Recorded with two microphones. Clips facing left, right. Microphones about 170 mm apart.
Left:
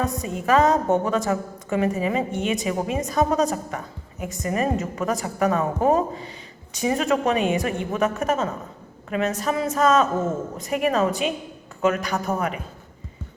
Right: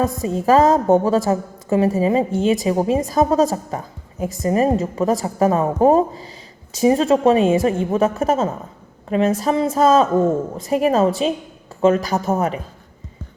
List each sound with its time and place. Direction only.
0.0 s a woman's voice: 30° right (ahead or behind)